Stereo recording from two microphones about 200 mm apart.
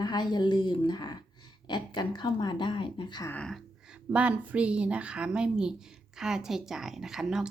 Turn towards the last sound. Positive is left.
turn(degrees=-5)  # may be behind; listen again after turning